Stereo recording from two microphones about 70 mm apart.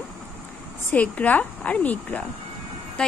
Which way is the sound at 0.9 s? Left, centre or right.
Left.